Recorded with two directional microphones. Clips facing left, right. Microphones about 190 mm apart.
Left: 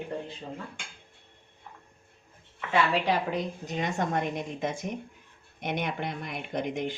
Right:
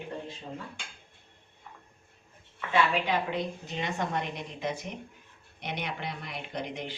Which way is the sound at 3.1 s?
45° left (ahead or behind).